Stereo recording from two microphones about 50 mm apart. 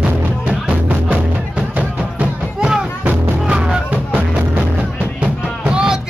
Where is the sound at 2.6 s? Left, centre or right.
Centre.